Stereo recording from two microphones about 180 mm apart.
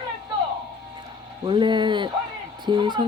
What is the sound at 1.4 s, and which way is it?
Speech, 25° right (ahead or behind).